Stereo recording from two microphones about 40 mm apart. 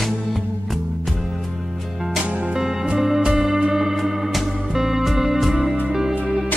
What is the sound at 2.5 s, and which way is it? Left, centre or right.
Music, centre.